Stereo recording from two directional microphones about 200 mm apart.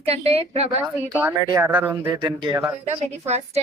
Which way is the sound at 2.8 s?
35° right (ahead or behind).